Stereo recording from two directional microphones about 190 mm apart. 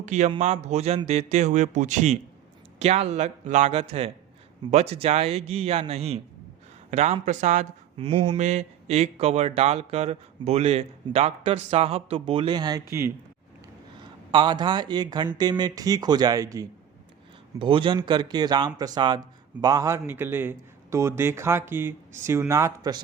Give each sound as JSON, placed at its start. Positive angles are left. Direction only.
{"t": 0.0, "sound": "speech", "side_deg": -40}
{"t": 14.3, "sound": "a man's voice", "side_deg": -25}